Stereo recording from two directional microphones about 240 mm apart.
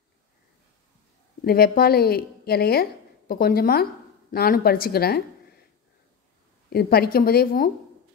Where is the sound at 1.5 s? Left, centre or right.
Left.